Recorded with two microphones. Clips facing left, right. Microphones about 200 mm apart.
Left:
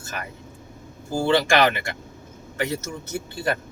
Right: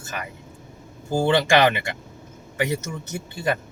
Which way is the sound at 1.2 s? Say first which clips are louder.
Right 1 dB; 20° right (ahead or behind).